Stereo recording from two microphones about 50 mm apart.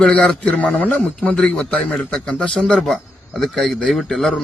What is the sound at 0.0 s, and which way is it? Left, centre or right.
Speech, left.